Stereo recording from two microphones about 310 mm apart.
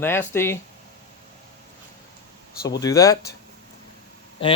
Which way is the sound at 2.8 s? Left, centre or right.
Centre.